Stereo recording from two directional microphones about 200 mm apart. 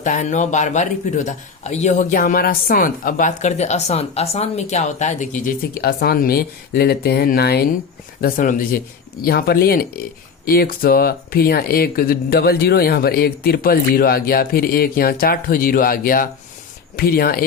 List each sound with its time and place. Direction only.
0.0 s speech: 40° left (ahead or behind)